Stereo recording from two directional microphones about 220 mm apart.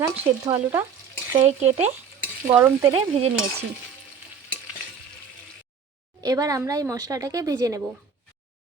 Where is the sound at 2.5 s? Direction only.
10° right (ahead or behind).